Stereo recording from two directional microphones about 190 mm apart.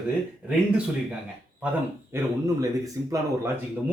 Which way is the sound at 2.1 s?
15° right (ahead or behind).